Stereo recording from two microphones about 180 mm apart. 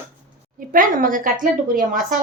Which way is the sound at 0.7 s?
50° right (ahead or behind).